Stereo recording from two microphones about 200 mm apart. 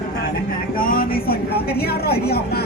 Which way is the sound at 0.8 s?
45° left (ahead or behind).